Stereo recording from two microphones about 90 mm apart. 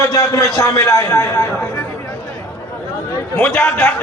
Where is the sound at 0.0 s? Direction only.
35° left (ahead or behind).